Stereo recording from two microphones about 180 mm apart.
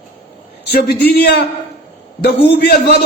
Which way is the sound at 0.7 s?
60° left (ahead or behind).